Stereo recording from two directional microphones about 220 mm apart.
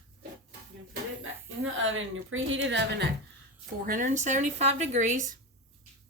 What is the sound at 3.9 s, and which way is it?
A woman's voice, 35° right (ahead or behind).